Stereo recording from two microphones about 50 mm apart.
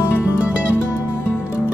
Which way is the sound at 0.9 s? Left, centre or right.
Left.